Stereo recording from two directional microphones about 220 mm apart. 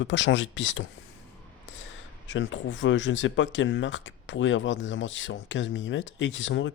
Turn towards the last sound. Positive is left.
turn(degrees=55)  # may be behind; listen again after turning